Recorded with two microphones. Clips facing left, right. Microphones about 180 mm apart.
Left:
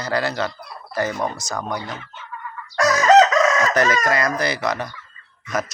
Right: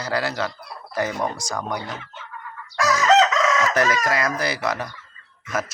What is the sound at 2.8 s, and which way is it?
Chicken, 45° left (ahead or behind).